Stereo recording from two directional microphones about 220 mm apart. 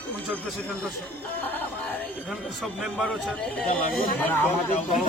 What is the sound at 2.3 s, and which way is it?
A man's voice, centre (ahead or behind).